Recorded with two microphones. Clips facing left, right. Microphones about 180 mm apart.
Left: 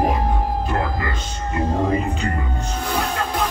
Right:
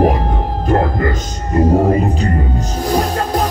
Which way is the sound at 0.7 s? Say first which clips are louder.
Right 8 dB; 45° right (ahead or behind).